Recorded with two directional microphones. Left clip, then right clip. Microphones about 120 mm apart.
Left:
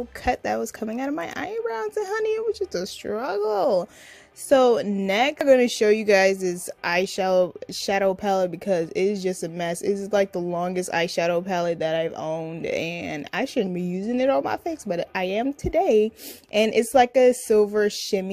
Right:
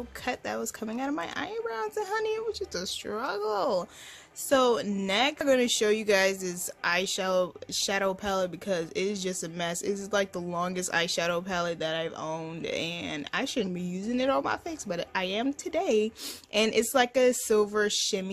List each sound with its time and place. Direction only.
0.2 s a woman's voice: 50° left (ahead or behind)